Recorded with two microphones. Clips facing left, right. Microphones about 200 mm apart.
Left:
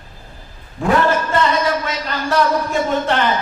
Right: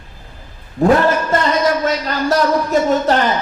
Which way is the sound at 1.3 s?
40° right (ahead or behind).